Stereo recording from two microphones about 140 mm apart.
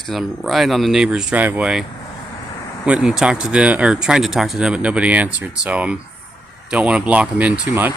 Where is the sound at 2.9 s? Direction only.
5° right (ahead or behind).